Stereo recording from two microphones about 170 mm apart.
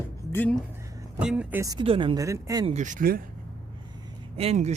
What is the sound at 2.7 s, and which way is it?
Speech, 45° right (ahead or behind).